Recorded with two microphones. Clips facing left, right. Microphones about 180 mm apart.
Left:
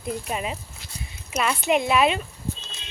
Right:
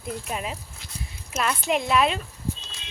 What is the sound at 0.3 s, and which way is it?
Speech, centre (ahead or behind).